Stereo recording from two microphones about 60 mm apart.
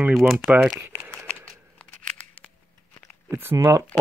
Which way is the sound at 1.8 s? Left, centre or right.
Left.